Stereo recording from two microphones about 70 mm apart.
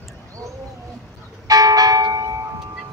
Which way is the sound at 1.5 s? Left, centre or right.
Right.